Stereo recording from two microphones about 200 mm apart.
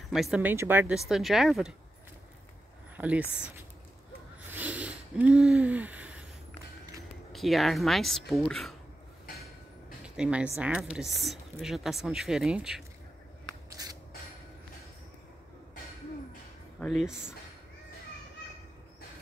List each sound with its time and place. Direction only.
0.1 s speech: 5° right (ahead or behind)
3.0 s speech: 5° right (ahead or behind)
4.5 s a sound: 10° right (ahead or behind)
7.3 s speech: centre (ahead or behind)
10.0 s speech: 5° right (ahead or behind)
13.7 s a sound: 20° right (ahead or behind)
16.8 s speech: centre (ahead or behind)